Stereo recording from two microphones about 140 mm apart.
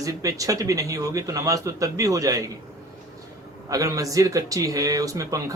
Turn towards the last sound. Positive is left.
turn(degrees=-25)  # may be behind; listen again after turning